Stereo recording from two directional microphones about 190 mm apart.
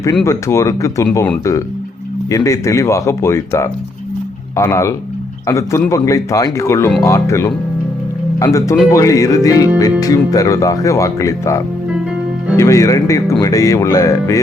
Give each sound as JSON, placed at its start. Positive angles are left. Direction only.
{"t": 0.3, "sound": "speech", "side_deg": 15}
{"t": 2.3, "sound": "speech", "side_deg": 15}